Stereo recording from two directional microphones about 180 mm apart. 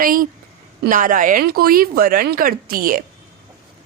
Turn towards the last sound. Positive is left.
turn(degrees=-55)  # may be behind; listen again after turning